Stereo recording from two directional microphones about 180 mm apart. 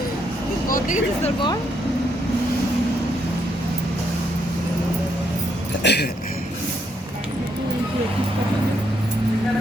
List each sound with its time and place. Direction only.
0.7 s speech: 45° left (ahead or behind)
5.8 s speech: 70° left (ahead or behind)